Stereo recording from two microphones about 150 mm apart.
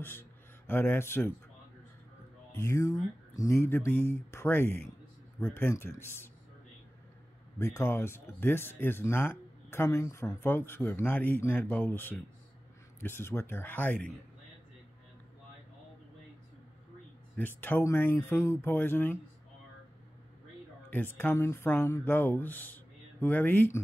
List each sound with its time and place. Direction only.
0.7 s speech: 15° left (ahead or behind)
2.5 s speech: 20° left (ahead or behind)
7.5 s speech: 15° left (ahead or behind)
17.4 s speech: 15° left (ahead or behind)
20.9 s speech: 15° left (ahead or behind)